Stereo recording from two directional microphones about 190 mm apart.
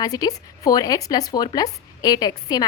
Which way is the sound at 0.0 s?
20° left (ahead or behind).